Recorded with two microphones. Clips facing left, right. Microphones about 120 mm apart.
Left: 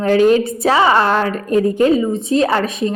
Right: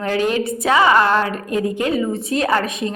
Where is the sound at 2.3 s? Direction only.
30° left (ahead or behind).